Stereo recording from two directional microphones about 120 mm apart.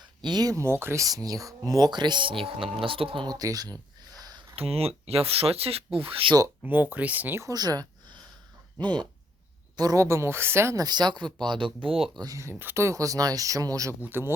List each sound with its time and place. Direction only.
0.2 s speech: 35° right (ahead or behind)
3.2 s a sound: 30° right (ahead or behind)
4.5 s speech: 55° right (ahead or behind)
6.6 s speech: 15° right (ahead or behind)
7.5 s a sound: 35° right (ahead or behind)
8.8 s speech: 40° right (ahead or behind); by 10.8 s 25° right (ahead or behind)
10.8 s speech: 35° right (ahead or behind)
12.2 s speech: 25° right (ahead or behind)
14.0 s speech: 20° right (ahead or behind)